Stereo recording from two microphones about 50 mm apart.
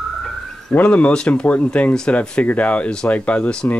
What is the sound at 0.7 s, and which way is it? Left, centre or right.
Speech, left.